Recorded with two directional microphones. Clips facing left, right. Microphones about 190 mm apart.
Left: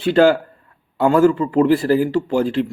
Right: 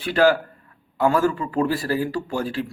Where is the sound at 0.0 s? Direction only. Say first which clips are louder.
Left 5 dB; 25° left (ahead or behind).